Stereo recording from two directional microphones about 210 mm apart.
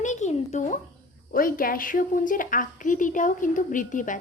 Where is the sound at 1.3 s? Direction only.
40° left (ahead or behind).